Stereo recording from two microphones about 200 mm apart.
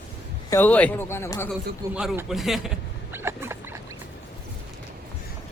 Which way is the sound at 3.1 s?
10° right (ahead or behind).